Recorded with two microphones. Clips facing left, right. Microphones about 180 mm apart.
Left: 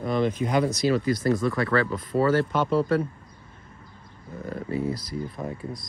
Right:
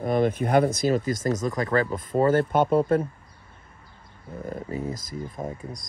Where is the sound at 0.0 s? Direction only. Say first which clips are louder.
Right 2 dB; 50° right (ahead or behind).